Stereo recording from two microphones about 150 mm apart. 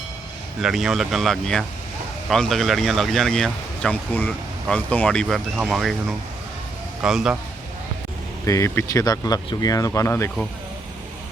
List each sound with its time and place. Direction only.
0.6 s speech: centre (ahead or behind)
5.5 s speech: 5° right (ahead or behind)
8.4 s speech: 20° left (ahead or behind)